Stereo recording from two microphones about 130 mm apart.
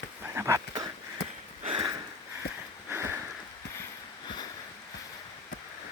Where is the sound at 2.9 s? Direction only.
20° right (ahead or behind).